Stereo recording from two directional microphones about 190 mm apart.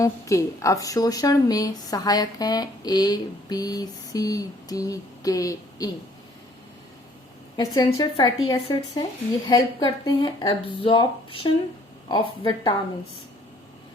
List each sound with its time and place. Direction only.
0.0 s a woman's voice: 15° left (ahead or behind)
7.5 s a woman's voice: 20° left (ahead or behind)